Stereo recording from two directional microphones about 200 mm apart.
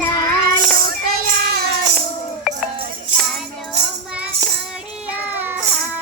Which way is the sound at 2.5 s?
Centre (ahead or behind).